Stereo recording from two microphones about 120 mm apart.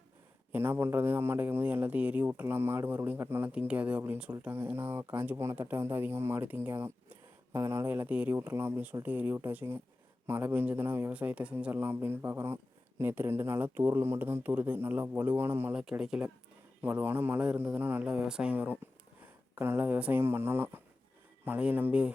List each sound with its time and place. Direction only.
0.5 s speech: 20° right (ahead or behind)
15.7 s speech: 5° right (ahead or behind)